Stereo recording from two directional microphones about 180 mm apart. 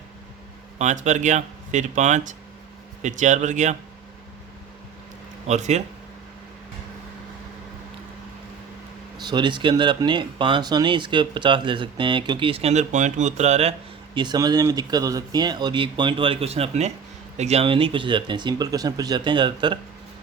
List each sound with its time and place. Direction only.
0.8 s speech: 45° right (ahead or behind)
5.5 s speech: 40° right (ahead or behind)
9.1 s speech: 25° right (ahead or behind)